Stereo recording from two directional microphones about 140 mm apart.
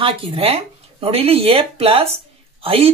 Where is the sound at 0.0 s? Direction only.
40° right (ahead or behind).